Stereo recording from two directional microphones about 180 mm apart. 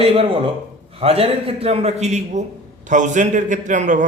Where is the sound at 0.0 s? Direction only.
30° right (ahead or behind).